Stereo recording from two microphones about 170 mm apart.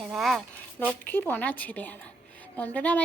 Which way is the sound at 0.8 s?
10° left (ahead or behind).